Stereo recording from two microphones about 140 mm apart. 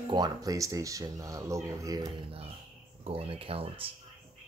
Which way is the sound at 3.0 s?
45° right (ahead or behind).